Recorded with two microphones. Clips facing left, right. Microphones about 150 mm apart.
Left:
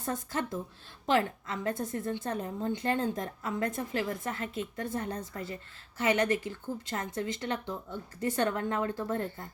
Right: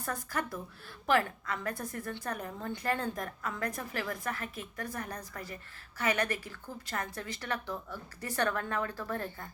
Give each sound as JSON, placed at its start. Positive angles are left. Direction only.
{"t": 0.0, "sound": "a woman's voice", "side_deg": 25}